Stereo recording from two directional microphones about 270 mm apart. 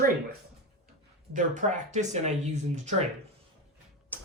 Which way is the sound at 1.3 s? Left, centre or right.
Right.